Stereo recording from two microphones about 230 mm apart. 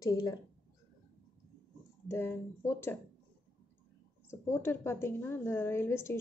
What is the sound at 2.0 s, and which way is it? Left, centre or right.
Speech, centre.